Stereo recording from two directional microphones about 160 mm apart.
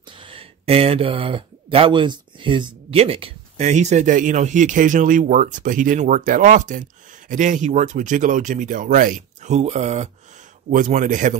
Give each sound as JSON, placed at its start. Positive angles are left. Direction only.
{"t": 0.2, "sound": "speech", "side_deg": -35}